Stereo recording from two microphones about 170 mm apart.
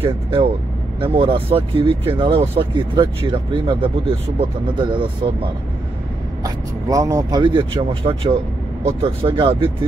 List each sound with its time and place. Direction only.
0.0 s speech: 30° right (ahead or behind)
6.4 s speech: 20° right (ahead or behind)